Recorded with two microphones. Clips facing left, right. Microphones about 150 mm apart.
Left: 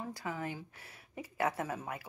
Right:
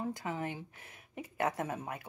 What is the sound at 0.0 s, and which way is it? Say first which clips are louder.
A woman's voice: right 2 dB; 25° right (ahead or behind).